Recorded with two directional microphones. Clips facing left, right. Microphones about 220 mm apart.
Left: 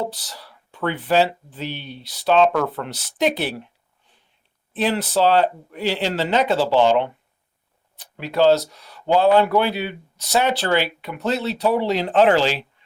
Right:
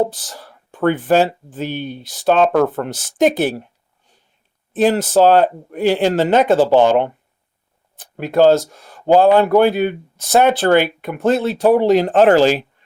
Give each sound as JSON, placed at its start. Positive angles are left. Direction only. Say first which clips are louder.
{"t": 0.0, "sound": "speech", "louder": "right 8 dB", "side_deg": -50}
{"t": 4.7, "sound": "speech", "louder": "right 7 dB", "side_deg": -45}